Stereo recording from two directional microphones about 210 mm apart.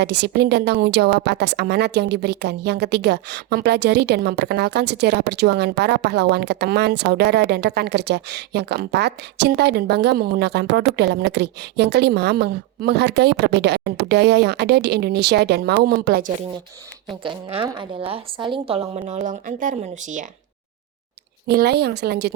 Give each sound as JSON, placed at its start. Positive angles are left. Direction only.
{"t": 0.0, "sound": "a woman's voice", "side_deg": -55}
{"t": 17.2, "sound": "speech", "side_deg": -25}
{"t": 21.4, "sound": "a woman's voice", "side_deg": -50}